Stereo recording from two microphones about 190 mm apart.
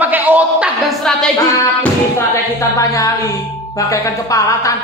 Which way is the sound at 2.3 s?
15° left (ahead or behind).